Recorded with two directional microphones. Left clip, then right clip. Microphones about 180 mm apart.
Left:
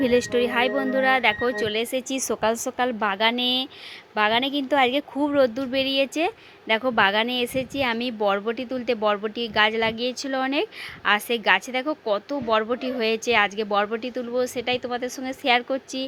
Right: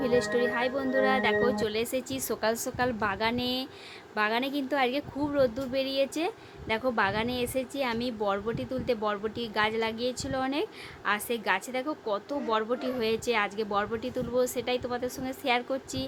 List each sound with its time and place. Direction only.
0.0 s a woman's voice: 35° left (ahead or behind)